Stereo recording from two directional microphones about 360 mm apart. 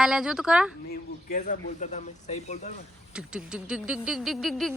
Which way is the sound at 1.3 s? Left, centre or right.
Left.